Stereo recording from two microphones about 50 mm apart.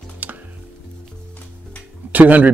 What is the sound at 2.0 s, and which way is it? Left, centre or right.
Speech, right.